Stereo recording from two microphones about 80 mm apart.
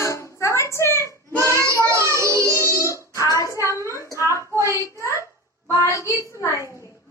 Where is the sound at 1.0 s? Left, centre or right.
Right.